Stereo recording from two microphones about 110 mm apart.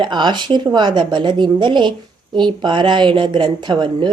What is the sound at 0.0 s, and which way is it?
A woman's voice, 45° right (ahead or behind).